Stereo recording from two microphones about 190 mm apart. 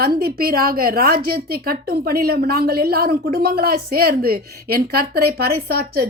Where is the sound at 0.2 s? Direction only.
50° right (ahead or behind).